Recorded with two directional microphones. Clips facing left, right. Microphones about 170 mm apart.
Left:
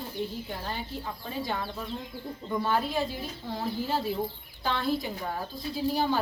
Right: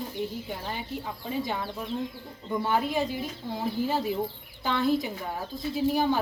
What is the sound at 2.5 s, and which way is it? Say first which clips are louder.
A woman's voice: right 1 dB; 10° right (ahead or behind).